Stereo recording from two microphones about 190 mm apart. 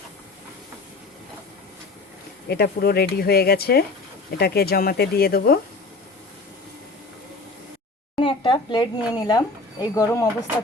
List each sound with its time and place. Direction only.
2.5 s speech: 55° left (ahead or behind)
8.1 s speech: 25° left (ahead or behind)